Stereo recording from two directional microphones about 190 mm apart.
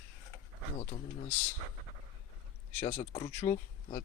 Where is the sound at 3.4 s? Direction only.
35° left (ahead or behind).